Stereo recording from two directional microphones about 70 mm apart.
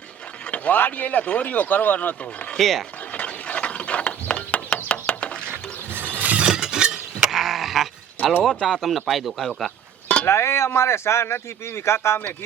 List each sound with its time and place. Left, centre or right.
0.5 s speech: left
2.6 s speech: centre
3.1 s ratchet: centre
5.5 s a sound: right
6.1 s chink: right; by 8.3 s centre
8.4 s speech: centre
10.2 s speech: left